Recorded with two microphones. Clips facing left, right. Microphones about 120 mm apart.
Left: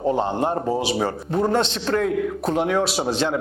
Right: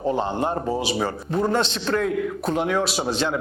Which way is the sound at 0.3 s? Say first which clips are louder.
Left 2 dB; 40° left (ahead or behind).